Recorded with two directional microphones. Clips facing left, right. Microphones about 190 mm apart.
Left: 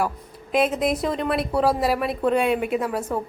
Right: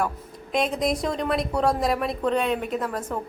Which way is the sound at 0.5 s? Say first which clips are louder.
Left 3 dB; 5° left (ahead or behind).